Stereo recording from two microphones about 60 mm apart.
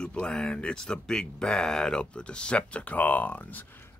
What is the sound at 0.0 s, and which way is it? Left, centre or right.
Speech, centre.